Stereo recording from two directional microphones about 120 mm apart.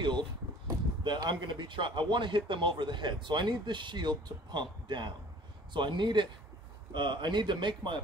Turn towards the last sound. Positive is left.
turn(degrees=-40)  # may be behind; listen again after turning